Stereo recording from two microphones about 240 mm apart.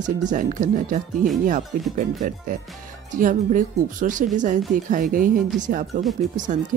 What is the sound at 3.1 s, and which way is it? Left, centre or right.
Speech, right.